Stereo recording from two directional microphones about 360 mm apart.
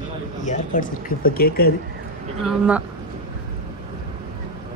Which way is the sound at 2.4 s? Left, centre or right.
Centre.